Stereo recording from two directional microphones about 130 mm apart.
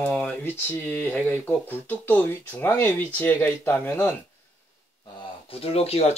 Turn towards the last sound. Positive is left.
turn(degrees=50)  # may be behind; listen again after turning